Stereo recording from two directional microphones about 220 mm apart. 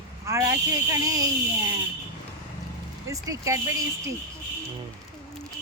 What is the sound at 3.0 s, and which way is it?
Speech, 15° right (ahead or behind).